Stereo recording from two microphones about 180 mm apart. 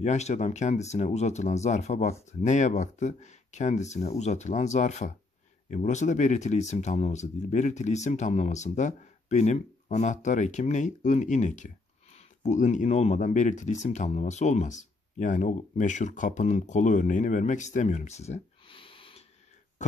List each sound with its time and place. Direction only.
0.0 s speech: 40° left (ahead or behind)